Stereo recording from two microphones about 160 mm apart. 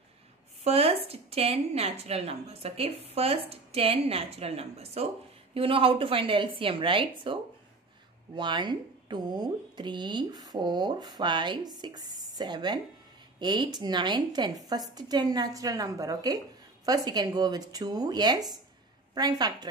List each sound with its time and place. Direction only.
0.7 s a woman's voice: 40° right (ahead or behind)
8.4 s speech: 30° right (ahead or behind)